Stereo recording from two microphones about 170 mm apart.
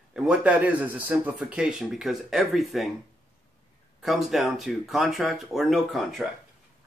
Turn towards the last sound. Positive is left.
turn(degrees=0)  # may be behind; listen again after turning